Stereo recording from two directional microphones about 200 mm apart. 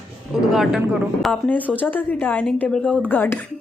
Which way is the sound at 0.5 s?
Centre (ahead or behind).